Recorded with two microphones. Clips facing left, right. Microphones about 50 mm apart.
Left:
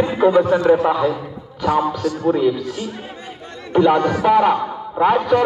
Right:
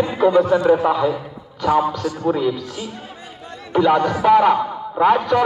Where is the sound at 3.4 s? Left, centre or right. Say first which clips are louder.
Left 1 dB; left.